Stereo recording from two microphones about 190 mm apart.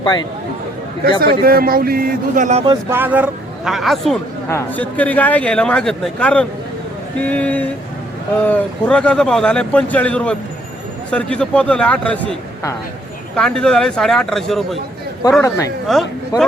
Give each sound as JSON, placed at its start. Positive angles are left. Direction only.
{"t": 1.2, "sound": "a man's voice", "side_deg": -55}
{"t": 2.9, "sound": "speech", "side_deg": -10}
{"t": 4.4, "sound": "speech", "side_deg": 10}
{"t": 15.2, "sound": "speech", "side_deg": 15}